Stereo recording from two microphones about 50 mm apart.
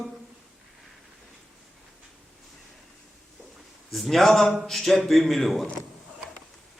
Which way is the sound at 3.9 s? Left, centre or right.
Centre.